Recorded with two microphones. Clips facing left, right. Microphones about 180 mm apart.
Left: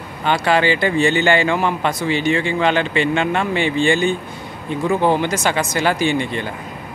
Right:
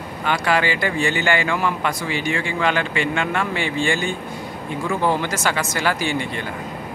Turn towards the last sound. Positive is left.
turn(degrees=20)  # may be behind; listen again after turning